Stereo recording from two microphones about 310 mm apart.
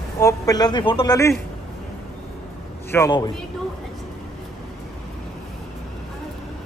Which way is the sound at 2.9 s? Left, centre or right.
Centre.